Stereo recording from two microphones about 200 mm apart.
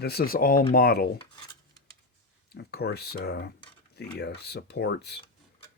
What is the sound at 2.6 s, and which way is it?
Speech, 55° left (ahead or behind).